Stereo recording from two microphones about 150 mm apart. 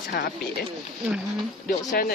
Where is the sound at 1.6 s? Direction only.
75° left (ahead or behind).